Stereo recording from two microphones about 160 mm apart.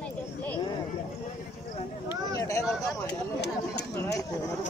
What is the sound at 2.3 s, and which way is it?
Speech, 20° left (ahead or behind).